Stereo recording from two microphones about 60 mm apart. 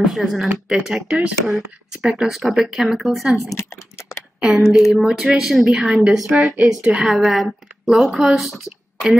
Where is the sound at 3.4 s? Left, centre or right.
Left.